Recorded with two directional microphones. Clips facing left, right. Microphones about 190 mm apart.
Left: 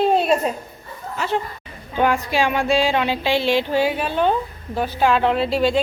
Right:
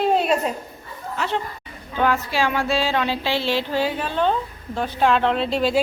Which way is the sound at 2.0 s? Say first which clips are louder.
Left 2 dB; 15° left (ahead or behind).